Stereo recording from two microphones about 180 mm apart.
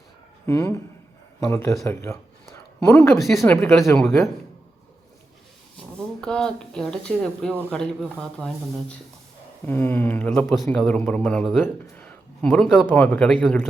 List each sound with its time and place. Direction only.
0.4 s a man's voice: 15° left (ahead or behind)
3.2 s speech: centre (ahead or behind)
3.4 s a man's voice: 10° left (ahead or behind)
6.2 s a man's voice: 5° left (ahead or behind)